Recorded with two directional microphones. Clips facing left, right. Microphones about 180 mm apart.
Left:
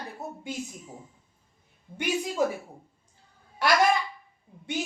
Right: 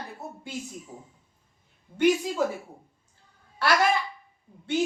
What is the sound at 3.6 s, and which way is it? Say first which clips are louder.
Speech: even; 15° left (ahead or behind).